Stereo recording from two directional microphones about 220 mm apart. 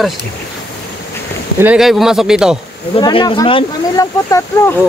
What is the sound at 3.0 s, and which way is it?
Speech, 25° left (ahead or behind).